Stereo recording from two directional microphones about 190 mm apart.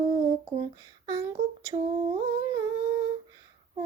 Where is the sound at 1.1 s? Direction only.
20° right (ahead or behind).